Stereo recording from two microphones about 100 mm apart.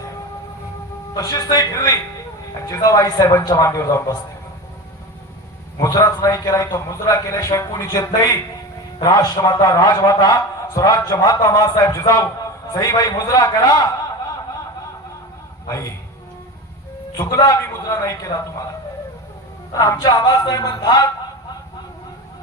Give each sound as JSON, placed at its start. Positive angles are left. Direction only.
{"t": 1.1, "sound": "a man's voice", "side_deg": 35}
{"t": 5.8, "sound": "a man's voice", "side_deg": 35}
{"t": 15.6, "sound": "a man's voice", "side_deg": 30}
{"t": 17.2, "sound": "a man's voice", "side_deg": 35}
{"t": 19.7, "sound": "a man's voice", "side_deg": 35}
{"t": 20.0, "sound": "a sound", "side_deg": 45}